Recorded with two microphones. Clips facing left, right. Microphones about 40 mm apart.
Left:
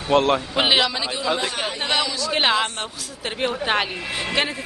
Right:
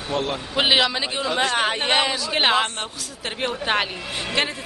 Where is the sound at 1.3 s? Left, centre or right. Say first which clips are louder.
Right 6 dB; right.